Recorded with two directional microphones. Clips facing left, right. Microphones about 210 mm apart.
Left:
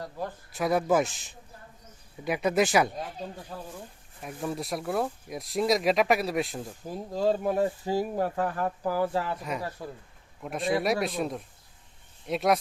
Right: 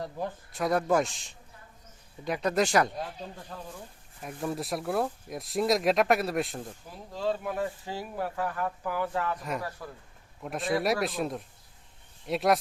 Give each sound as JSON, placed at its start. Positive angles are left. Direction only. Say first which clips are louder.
{"t": 0.5, "sound": "speech", "louder": "left 1 dB", "side_deg": 0}
{"t": 2.2, "sound": "speech", "louder": "left 2 dB", "side_deg": 5}
{"t": 6.8, "sound": "speech", "louder": "left 5 dB", "side_deg": 40}
{"t": 9.4, "sound": "speech", "louder": "left 1 dB", "side_deg": 0}
{"t": 9.6, "sound": "speech", "louder": "left 2 dB", "side_deg": 25}
{"t": 10.4, "sound": "speech", "louder": "left 1 dB", "side_deg": 0}